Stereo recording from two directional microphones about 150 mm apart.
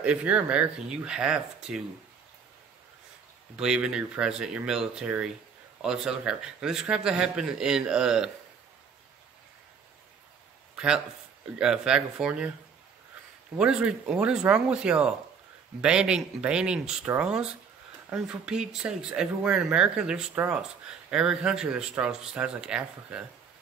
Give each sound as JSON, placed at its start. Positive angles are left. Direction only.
{"t": 0.0, "sound": "speech", "side_deg": -10}
{"t": 3.5, "sound": "speech", "side_deg": -5}
{"t": 11.5, "sound": "speech", "side_deg": -5}
{"t": 13.6, "sound": "speech", "side_deg": -5}